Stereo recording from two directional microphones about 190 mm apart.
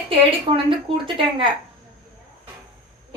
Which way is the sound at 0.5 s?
25° right (ahead or behind).